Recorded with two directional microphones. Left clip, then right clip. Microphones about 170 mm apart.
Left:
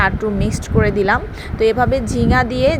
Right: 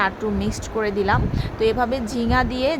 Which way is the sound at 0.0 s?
20° left (ahead or behind).